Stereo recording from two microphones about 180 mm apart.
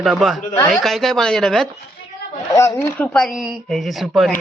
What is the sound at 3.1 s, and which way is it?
Speech, centre (ahead or behind).